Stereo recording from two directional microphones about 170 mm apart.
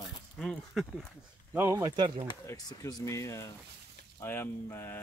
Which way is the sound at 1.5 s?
15° right (ahead or behind).